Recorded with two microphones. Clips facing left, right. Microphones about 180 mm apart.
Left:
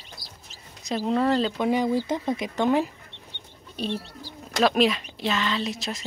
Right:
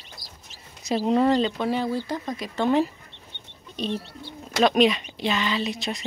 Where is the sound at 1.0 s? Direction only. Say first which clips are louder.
Right 3 dB; 5° right (ahead or behind).